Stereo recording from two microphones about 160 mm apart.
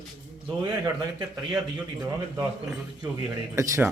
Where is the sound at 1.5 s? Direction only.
5° right (ahead or behind).